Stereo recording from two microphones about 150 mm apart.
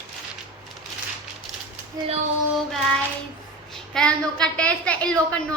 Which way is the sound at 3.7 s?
5° left (ahead or behind).